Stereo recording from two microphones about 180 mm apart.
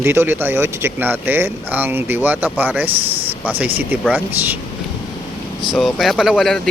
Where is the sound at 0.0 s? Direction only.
15° right (ahead or behind).